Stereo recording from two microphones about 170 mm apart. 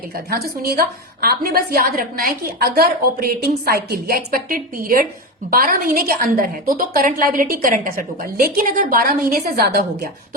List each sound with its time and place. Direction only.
0.3 s a woman's voice: 65° right (ahead or behind)